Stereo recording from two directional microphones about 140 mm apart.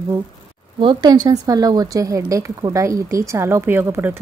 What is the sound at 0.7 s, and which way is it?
A woman's voice, 30° right (ahead or behind).